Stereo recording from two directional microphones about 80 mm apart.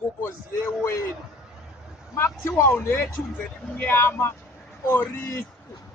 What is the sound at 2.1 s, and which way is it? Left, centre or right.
A man's voice, left.